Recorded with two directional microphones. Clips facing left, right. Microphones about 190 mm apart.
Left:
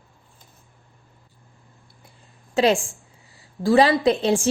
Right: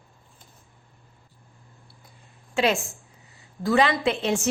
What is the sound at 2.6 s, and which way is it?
A woman's voice, 35° left (ahead or behind).